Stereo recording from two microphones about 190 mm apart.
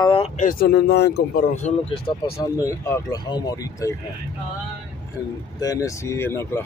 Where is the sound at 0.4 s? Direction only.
45° left (ahead or behind).